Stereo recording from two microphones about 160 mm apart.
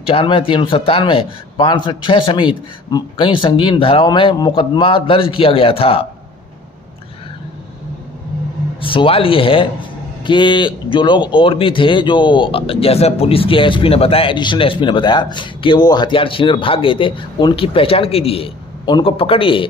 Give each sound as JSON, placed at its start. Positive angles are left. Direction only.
{"t": 0.0, "sound": "speech", "side_deg": 35}
{"t": 8.8, "sound": "speech", "side_deg": 35}